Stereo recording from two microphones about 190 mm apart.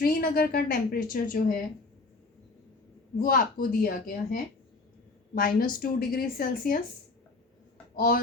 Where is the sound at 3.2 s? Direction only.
50° left (ahead or behind).